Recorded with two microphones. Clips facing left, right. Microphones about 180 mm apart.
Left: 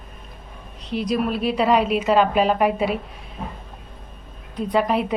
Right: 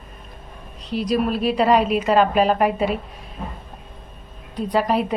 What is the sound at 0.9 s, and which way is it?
Speech, 40° right (ahead or behind).